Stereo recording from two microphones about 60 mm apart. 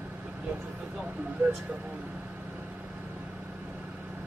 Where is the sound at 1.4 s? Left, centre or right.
Right.